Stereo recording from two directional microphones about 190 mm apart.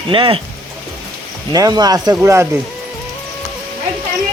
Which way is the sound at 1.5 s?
20° right (ahead or behind).